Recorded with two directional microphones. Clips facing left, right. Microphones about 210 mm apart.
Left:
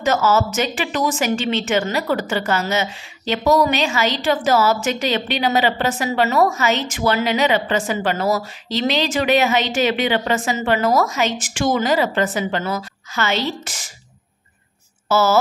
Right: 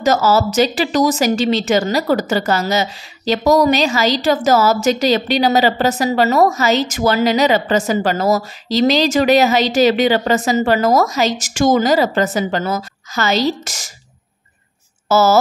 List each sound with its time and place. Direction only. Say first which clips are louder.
0.0 s a woman's voice: right 3 dB; 40° right (ahead or behind)
15.0 s speech: right 4 dB; 40° right (ahead or behind)